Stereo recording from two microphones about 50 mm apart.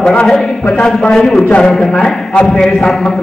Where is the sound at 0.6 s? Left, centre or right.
Centre.